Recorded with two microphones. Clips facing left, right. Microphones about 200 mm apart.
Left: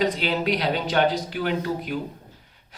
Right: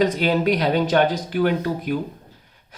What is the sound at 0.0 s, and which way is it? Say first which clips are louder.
Speech: right 5 dB; 50° right (ahead or behind).